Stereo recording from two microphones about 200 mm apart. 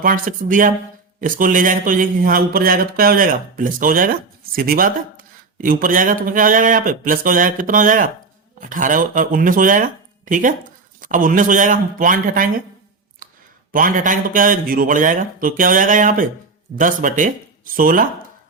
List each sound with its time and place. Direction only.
0.0 s speech: 40° right (ahead or behind)
13.7 s speech: 40° right (ahead or behind)